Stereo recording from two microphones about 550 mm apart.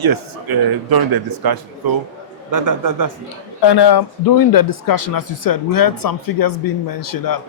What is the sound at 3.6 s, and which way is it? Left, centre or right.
Speech, left.